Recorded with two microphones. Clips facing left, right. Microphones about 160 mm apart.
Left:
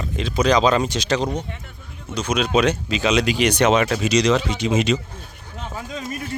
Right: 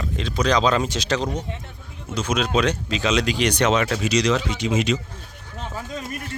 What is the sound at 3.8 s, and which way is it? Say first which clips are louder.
Speech: left 2 dB; 20° left (ahead or behind).